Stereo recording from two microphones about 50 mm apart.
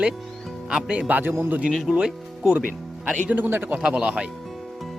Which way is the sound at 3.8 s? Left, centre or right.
Centre.